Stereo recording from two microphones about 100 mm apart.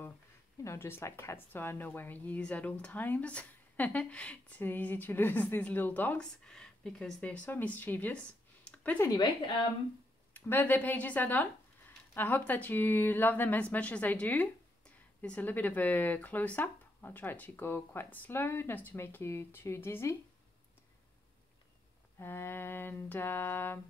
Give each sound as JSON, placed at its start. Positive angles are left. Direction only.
{"t": 0.7, "sound": "speech", "side_deg": 25}
{"t": 8.6, "sound": "a sound", "side_deg": 15}
{"t": 10.3, "sound": "speech", "side_deg": 20}
{"t": 22.2, "sound": "speech", "side_deg": 25}